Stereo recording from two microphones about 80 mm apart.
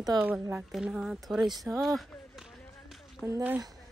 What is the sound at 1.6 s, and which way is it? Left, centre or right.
Run, centre.